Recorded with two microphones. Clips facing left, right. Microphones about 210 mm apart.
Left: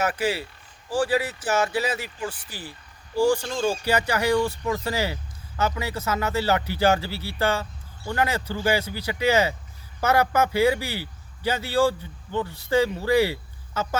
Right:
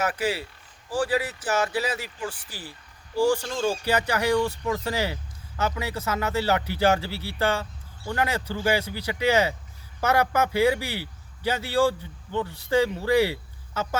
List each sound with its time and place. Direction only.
0.0 s speech: 25° left (ahead or behind); by 14.0 s centre (ahead or behind)